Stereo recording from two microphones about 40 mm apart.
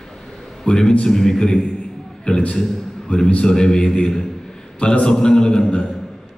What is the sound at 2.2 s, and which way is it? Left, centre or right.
A man's voice, left.